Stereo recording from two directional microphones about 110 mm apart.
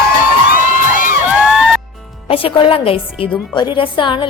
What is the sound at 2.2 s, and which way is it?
A woman's voice, 55° left (ahead or behind).